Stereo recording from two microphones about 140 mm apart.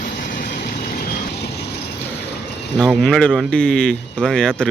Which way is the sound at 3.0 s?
5° left (ahead or behind).